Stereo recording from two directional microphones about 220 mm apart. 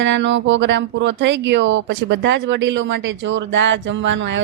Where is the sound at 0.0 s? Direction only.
55° right (ahead or behind).